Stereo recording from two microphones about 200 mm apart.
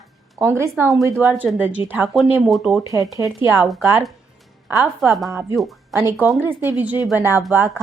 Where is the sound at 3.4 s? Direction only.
10° right (ahead or behind).